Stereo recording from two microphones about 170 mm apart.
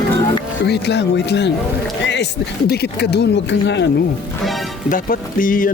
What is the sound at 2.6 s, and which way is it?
Speech, 75° left (ahead or behind).